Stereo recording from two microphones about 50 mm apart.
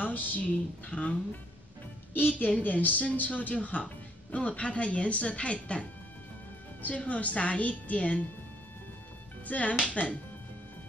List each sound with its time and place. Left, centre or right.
0.0 s a sound: left
0.8 s speech: left
2.1 s a woman's voice: left
9.5 s speech: left